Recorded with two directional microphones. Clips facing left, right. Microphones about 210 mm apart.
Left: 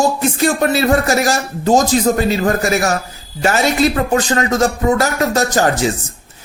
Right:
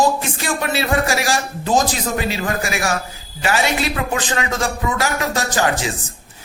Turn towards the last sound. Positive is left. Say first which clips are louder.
# left 5 dB
turn(degrees=40)  # may be behind; listen again after turning